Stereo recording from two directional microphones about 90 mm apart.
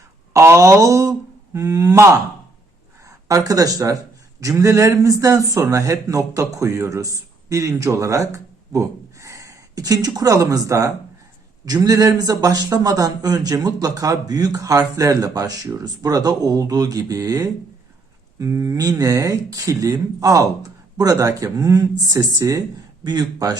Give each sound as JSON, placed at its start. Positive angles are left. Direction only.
{"t": 0.3, "sound": "speech", "side_deg": -35}
{"t": 3.1, "sound": "a man's voice", "side_deg": -40}